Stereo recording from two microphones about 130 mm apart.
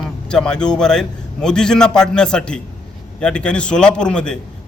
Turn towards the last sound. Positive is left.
turn(degrees=5)  # may be behind; listen again after turning